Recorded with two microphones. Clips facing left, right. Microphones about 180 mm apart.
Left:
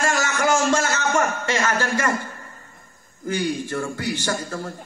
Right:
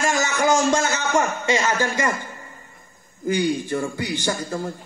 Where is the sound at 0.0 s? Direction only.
15° right (ahead or behind).